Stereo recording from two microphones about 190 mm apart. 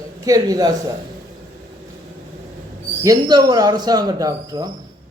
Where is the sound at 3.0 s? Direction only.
20° right (ahead or behind).